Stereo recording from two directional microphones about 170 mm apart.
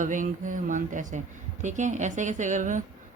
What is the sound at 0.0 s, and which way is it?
Speech, 50° right (ahead or behind).